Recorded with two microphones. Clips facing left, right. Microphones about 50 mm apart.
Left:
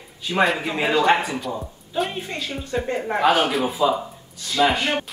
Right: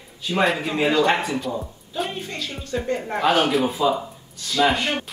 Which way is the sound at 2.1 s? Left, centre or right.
Centre.